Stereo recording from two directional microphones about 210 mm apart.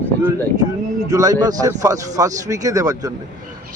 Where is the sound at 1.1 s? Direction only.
15° right (ahead or behind).